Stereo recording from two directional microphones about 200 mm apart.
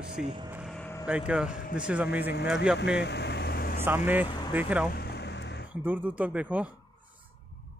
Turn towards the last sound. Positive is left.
turn(degrees=-5)  # may be behind; listen again after turning